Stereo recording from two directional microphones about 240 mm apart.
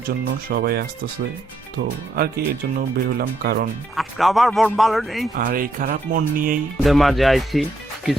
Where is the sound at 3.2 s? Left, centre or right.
Right.